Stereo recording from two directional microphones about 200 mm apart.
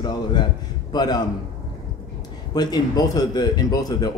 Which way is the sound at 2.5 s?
20° left (ahead or behind).